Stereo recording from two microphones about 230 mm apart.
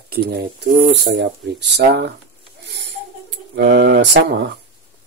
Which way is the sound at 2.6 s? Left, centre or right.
Right.